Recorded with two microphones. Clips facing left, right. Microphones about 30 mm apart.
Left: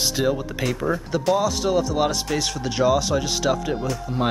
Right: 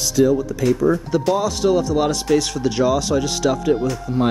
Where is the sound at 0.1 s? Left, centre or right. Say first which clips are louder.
Right 6 dB; left.